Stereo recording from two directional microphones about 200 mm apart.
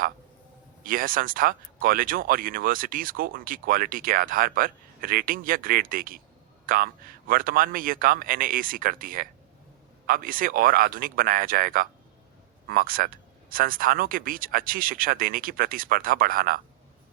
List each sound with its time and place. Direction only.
0.9 s speech: 45° right (ahead or behind)